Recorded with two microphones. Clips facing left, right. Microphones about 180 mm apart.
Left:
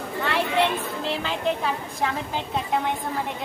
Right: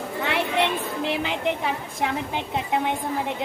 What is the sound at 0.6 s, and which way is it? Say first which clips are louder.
Music: even; 20° right (ahead or behind).